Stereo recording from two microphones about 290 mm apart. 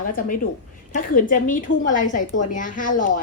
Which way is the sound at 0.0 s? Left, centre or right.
Left.